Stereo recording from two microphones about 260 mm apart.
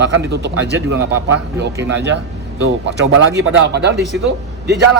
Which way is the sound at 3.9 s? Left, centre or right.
Centre.